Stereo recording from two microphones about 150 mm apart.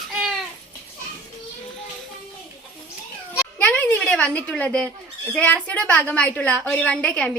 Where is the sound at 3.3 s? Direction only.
10° left (ahead or behind).